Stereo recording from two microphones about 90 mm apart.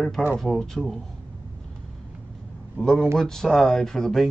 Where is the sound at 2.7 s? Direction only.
5° left (ahead or behind).